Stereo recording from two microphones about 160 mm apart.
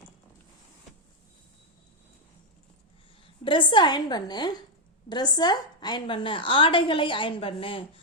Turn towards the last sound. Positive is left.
turn(degrees=35)  # may be behind; listen again after turning